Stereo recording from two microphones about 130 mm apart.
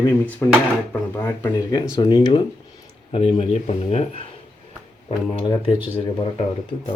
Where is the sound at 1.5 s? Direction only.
30° left (ahead or behind).